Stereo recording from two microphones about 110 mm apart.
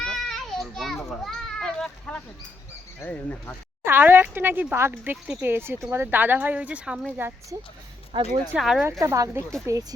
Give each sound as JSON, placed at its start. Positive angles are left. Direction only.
{"t": 0.0, "sound": "children playing", "side_deg": 5}
{"t": 3.0, "sound": "speech", "side_deg": 15}
{"t": 3.8, "sound": "speech", "side_deg": -20}
{"t": 8.1, "sound": "speech", "side_deg": -45}
{"t": 8.5, "sound": "speech", "side_deg": -5}
{"t": 8.8, "sound": "speech", "side_deg": -25}